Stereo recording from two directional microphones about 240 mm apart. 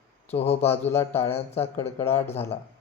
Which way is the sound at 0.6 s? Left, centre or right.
Centre.